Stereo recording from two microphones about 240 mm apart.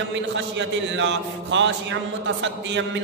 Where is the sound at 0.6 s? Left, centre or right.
Right.